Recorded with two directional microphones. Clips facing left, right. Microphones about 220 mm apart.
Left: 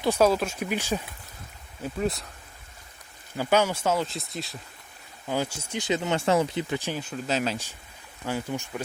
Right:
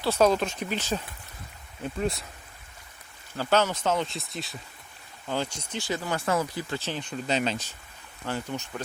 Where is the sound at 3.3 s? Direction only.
10° left (ahead or behind).